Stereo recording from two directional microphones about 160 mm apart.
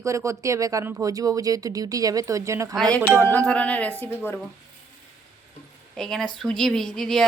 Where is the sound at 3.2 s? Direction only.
10° left (ahead or behind).